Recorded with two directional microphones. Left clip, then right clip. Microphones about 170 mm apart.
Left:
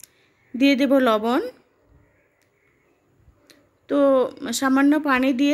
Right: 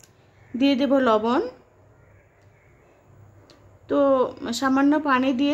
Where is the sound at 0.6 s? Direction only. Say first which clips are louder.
Left 2 dB; 20° left (ahead or behind).